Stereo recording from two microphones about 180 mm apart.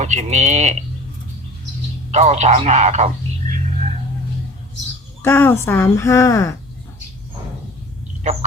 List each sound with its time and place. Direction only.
0.0 s speech: 40° right (ahead or behind)
2.0 s speech: 35° right (ahead or behind)
5.2 s speech: 10° left (ahead or behind)
8.2 s speech: 40° right (ahead or behind)